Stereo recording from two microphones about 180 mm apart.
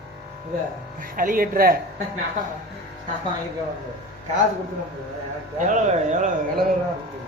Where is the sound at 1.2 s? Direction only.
50° right (ahead or behind).